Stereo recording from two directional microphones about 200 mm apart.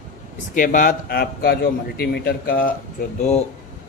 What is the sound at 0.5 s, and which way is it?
Speech, 40° left (ahead or behind).